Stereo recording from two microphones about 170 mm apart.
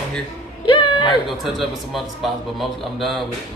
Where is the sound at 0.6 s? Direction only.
30° left (ahead or behind).